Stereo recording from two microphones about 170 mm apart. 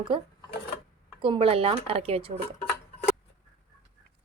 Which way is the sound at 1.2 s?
30° right (ahead or behind).